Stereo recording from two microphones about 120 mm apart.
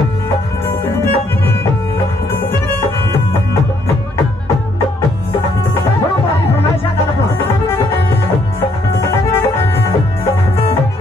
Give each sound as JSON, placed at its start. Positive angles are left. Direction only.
{"t": 0.9, "sound": "music", "side_deg": 20}
{"t": 8.5, "sound": "music", "side_deg": 20}